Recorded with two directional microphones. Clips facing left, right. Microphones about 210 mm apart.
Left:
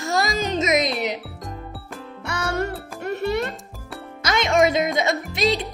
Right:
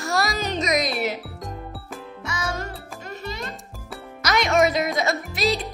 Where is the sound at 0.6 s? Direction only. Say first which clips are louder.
Left 2 dB; 25° left (ahead or behind).